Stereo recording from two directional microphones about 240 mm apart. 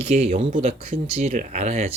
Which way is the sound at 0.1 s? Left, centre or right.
Right.